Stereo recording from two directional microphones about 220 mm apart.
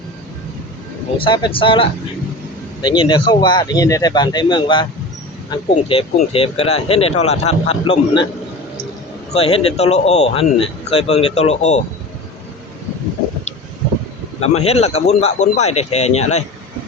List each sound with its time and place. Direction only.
1.2 s speech: 25° left (ahead or behind)
9.3 s speech: 30° left (ahead or behind)
14.4 s speech: 30° left (ahead or behind)